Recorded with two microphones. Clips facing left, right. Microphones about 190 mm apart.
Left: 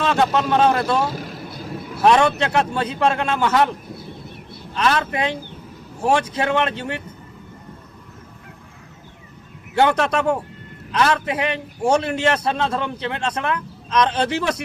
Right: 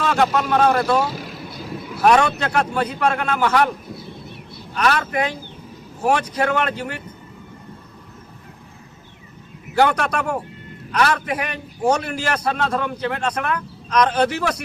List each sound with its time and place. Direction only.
0.0 s a man's voice: 25° left (ahead or behind)
2.0 s a man's voice: 25° left (ahead or behind)
4.7 s a man's voice: 25° left (ahead or behind)
9.7 s a man's voice: 25° left (ahead or behind)